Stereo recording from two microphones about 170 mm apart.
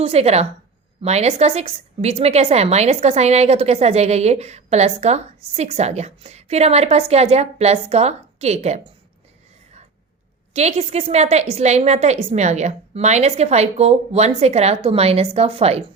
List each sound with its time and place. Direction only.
0.0 s a woman's voice: 35° right (ahead or behind)
10.5 s a woman's voice: 40° right (ahead or behind)